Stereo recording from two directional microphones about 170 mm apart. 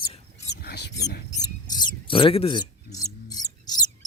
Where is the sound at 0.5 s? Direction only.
75° left (ahead or behind).